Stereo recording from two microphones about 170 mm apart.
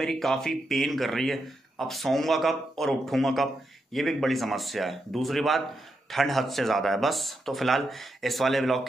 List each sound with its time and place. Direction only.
0.0 s speech: centre (ahead or behind)